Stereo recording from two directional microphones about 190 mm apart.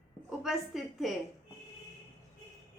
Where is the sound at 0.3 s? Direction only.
Centre (ahead or behind).